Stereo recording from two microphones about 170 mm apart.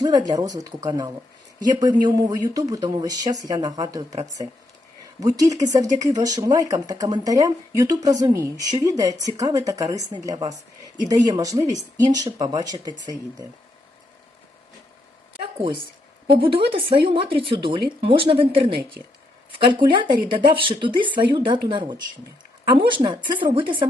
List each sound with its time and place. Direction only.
0.0 s speech: 25° right (ahead or behind)
5.2 s speech: 20° right (ahead or behind)
15.6 s speech: 30° right (ahead or behind)